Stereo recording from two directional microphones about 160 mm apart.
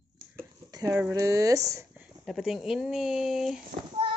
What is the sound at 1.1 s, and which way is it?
Speech, 20° right (ahead or behind).